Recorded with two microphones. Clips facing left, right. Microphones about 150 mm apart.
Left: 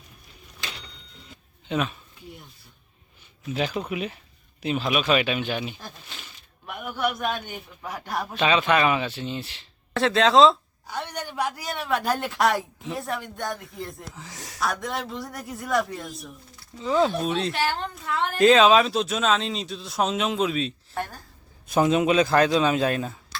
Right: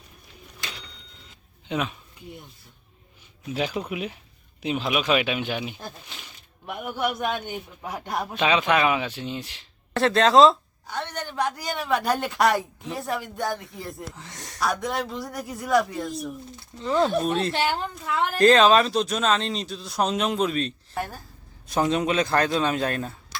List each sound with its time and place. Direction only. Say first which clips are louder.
1.6 s speech: left 1 dB; 15° right (ahead or behind)
3.5 s speech: even; 10° right (ahead or behind)
6.8 s a man's voice: even; 20° right (ahead or behind)
9.9 s a woman's voice: right 1 dB; centre (ahead or behind)
17.5 s a man's voice: right 1 dB; 20° right (ahead or behind)
17.7 s a woman's voice: right 1 dB; 5° right (ahead or behind)